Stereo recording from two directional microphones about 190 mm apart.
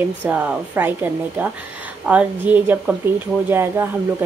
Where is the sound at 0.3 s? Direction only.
10° right (ahead or behind).